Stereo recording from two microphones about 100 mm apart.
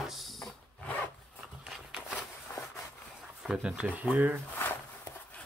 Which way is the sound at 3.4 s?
5° right (ahead or behind).